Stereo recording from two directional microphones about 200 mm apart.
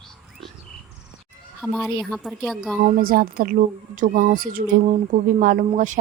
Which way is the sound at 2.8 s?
45° right (ahead or behind).